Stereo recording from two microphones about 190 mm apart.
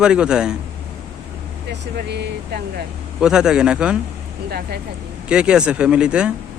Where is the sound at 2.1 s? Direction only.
60° right (ahead or behind).